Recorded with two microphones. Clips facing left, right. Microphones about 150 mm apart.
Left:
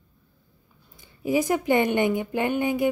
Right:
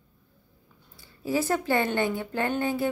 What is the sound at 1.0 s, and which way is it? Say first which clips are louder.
Speech: left 4 dB; 15° left (ahead or behind).